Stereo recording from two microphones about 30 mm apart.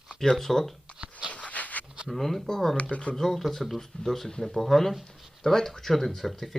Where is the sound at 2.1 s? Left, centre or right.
Centre.